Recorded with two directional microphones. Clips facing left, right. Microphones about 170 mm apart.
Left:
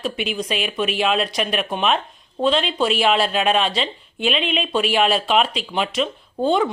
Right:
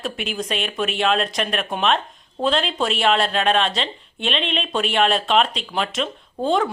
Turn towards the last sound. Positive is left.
turn(degrees=0)  # may be behind; listen again after turning